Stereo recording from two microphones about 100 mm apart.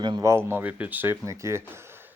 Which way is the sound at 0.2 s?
25° right (ahead or behind).